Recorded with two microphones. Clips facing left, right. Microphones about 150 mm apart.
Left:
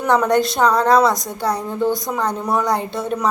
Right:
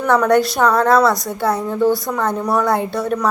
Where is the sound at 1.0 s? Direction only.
15° left (ahead or behind).